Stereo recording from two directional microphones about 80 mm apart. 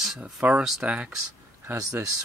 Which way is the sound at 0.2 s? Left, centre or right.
Centre.